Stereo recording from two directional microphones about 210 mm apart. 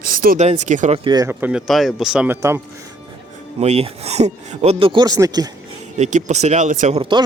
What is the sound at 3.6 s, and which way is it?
Speech, 30° right (ahead or behind).